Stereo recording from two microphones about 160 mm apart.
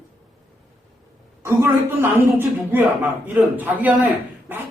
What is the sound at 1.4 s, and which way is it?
A woman's voice, 15° right (ahead or behind).